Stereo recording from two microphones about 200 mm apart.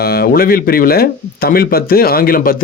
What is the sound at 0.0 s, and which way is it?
Speech, 50° left (ahead or behind).